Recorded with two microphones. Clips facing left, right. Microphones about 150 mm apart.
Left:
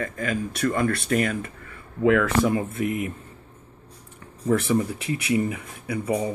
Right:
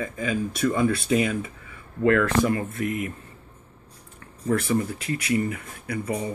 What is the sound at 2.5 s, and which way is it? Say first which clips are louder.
Speech: left 2 dB; 15° left (ahead or behind).